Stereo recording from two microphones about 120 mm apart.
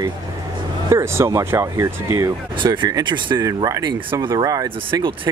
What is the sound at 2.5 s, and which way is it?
Speech, 40° right (ahead or behind).